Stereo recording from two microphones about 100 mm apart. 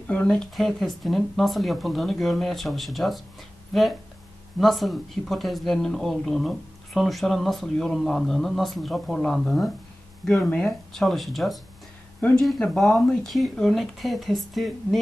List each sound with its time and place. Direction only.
0.0 s speech: 15° left (ahead or behind)
0.6 s speech: centre (ahead or behind)
12.2 s speech: 15° left (ahead or behind)